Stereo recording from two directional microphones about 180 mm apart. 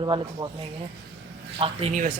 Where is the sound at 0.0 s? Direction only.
25° right (ahead or behind).